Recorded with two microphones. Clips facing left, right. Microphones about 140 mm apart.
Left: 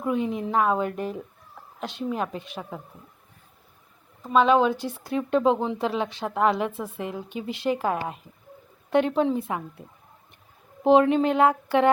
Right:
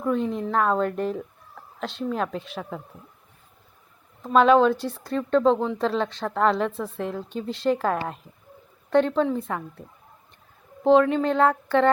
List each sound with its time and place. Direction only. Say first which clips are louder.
0.0 s speech: right 1 dB; 5° left (ahead or behind)
4.2 s speech: right 2 dB; 5° left (ahead or behind)
10.8 s speech: even; 20° left (ahead or behind)